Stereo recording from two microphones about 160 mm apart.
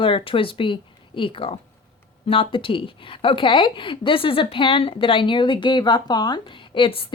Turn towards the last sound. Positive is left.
turn(degrees=35)  # may be behind; listen again after turning